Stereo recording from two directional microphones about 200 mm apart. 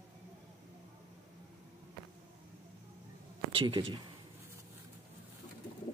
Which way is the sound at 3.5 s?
20° right (ahead or behind).